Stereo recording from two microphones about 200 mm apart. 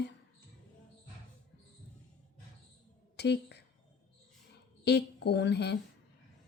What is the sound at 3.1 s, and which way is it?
Speech, 55° left (ahead or behind).